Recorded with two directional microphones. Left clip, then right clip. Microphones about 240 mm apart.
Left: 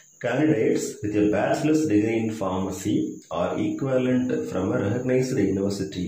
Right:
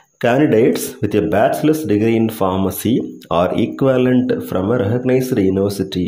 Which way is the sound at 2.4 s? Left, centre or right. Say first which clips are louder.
Right 10 dB; right.